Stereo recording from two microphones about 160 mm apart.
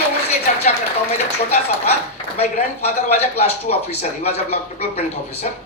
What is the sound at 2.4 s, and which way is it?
Speech, 45° left (ahead or behind).